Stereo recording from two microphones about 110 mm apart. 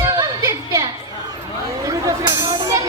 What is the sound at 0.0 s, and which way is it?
Music, 30° right (ahead or behind).